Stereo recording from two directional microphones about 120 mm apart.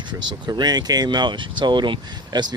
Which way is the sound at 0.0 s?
40° right (ahead or behind).